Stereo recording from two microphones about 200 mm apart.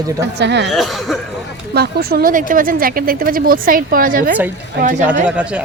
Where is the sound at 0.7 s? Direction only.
Centre (ahead or behind).